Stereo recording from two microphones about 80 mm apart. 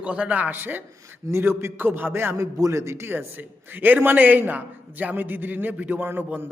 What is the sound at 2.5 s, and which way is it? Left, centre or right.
A man's voice, right.